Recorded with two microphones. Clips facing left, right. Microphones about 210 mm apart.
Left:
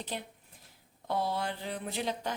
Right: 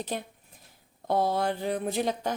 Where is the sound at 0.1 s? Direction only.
50° right (ahead or behind).